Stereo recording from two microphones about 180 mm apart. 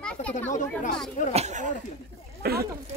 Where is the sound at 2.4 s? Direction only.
60° right (ahead or behind).